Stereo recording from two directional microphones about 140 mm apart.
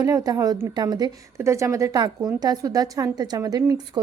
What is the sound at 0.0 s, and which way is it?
A woman's voice, 25° right (ahead or behind).